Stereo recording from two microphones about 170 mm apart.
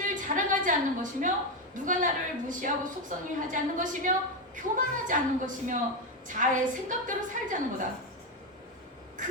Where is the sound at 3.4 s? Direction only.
50° right (ahead or behind).